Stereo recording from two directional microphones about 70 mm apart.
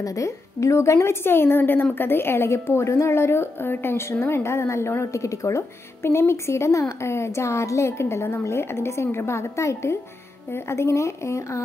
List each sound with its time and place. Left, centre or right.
0.0 s a woman's voice: left
1.2 s a woman's voice: left